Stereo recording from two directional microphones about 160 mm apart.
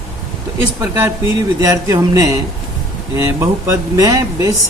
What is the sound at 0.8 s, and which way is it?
Speech, 20° right (ahead or behind).